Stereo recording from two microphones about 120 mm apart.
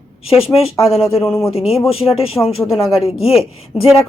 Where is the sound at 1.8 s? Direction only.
50° left (ahead or behind).